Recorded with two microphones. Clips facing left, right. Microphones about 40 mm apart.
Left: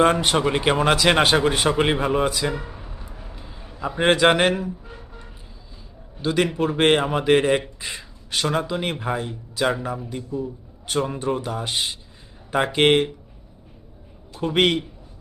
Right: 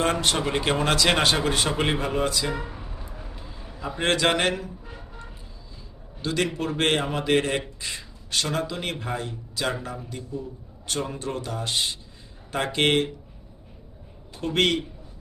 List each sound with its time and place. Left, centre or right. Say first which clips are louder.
0.0 s a man's voice: left 6 dB; centre
2.6 s a sound: even; centre
6.2 s a man's voice: left 5 dB; centre
14.4 s a man's voice: left 3 dB; centre